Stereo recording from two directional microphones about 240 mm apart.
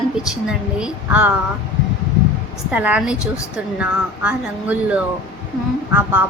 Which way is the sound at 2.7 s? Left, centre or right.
Centre.